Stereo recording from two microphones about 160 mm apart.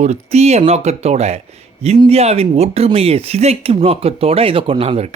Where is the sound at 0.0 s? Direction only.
45° right (ahead or behind).